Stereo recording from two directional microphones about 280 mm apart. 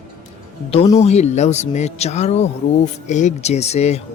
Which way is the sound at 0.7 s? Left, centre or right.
Left.